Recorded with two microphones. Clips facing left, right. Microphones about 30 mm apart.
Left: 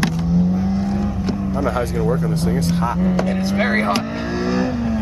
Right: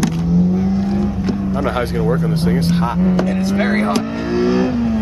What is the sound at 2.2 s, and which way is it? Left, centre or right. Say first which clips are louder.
Speech: right 3 dB; right.